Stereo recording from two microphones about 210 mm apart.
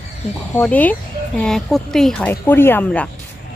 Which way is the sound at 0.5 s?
5° left (ahead or behind).